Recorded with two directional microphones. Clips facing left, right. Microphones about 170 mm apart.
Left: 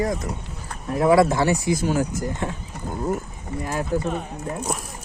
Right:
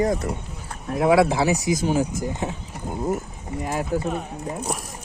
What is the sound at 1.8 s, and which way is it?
Speech, 15° right (ahead or behind).